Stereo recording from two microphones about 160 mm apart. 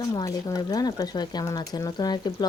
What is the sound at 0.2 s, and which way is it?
Speech, 25° left (ahead or behind).